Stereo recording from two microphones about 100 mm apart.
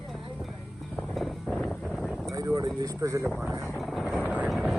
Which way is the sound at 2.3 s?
35° right (ahead or behind).